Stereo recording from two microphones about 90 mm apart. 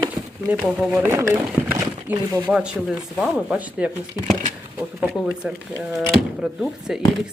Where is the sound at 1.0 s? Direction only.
25° right (ahead or behind).